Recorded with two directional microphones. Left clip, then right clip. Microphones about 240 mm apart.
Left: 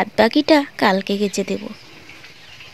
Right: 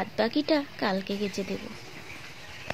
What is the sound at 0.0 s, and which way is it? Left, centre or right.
Speech, left.